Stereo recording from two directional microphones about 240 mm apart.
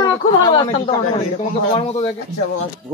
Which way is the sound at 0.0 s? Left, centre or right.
Centre.